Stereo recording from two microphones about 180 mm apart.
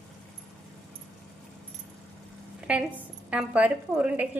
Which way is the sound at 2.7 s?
5° right (ahead or behind).